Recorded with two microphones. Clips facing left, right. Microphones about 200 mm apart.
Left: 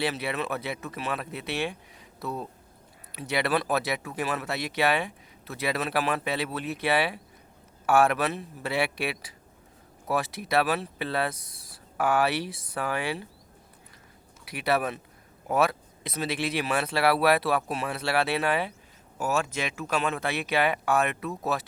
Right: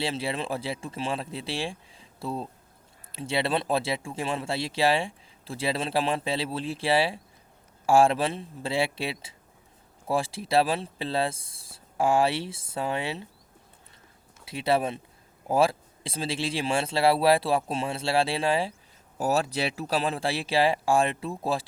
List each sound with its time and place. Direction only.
0.0 s speech: 25° right (ahead or behind)
14.4 s speech: 25° right (ahead or behind)